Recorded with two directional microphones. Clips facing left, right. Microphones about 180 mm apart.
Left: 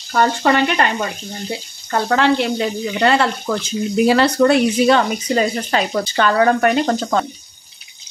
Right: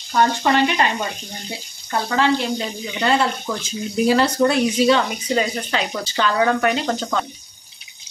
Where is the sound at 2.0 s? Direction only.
65° left (ahead or behind); by 7.2 s 45° left (ahead or behind).